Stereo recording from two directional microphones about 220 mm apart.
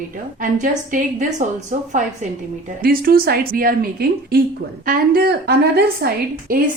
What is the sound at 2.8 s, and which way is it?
A woman's voice, 45° right (ahead or behind).